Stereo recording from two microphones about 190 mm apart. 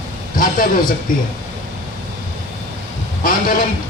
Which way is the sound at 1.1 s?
45° left (ahead or behind).